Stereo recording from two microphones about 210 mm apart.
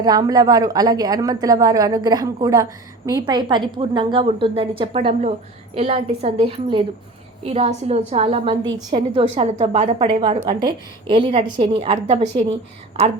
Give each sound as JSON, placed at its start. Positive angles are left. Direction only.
{"t": 0.0, "sound": "a woman's voice", "side_deg": -20}